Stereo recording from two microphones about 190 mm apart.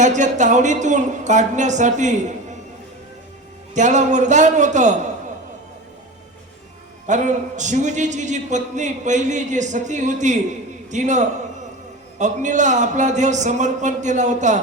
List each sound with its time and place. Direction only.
0.0 s a man's voice: 40° right (ahead or behind)
3.8 s a man's voice: 40° right (ahead or behind)
7.1 s a man's voice: 40° right (ahead or behind)